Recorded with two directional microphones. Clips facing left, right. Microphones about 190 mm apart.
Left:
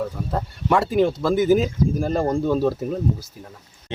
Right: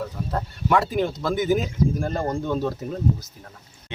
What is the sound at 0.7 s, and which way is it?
Speech, 5° left (ahead or behind).